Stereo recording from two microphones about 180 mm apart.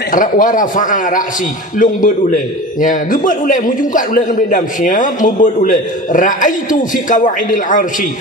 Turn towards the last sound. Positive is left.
turn(degrees=45)  # may be behind; listen again after turning